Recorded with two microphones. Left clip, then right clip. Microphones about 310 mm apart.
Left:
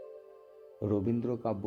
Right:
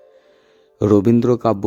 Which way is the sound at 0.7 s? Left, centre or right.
Right.